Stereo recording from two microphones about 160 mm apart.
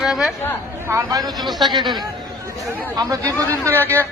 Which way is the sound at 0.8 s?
20° right (ahead or behind).